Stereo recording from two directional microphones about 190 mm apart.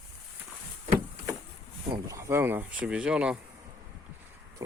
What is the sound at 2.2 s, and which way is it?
Speech, 15° right (ahead or behind).